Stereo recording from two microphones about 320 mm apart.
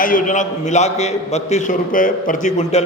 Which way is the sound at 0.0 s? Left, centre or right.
Left.